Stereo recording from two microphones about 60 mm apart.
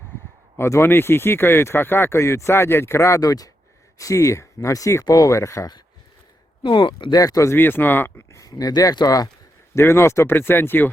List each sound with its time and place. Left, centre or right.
0.5 s speech: left
3.2 s speech: left
3.9 s speech: left
5.0 s speech: left
7.2 s speech: left
7.5 s speech: left
8.3 s speech: left
9.7 s speech: left
10.3 s speech: left